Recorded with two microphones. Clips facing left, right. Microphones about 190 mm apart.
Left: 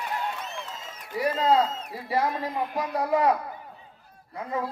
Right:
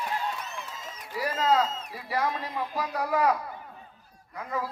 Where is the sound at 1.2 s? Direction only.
25° left (ahead or behind).